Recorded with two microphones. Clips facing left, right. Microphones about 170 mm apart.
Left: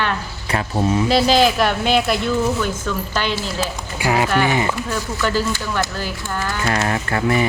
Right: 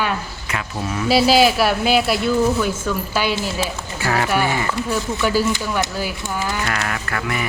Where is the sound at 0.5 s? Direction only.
30° left (ahead or behind).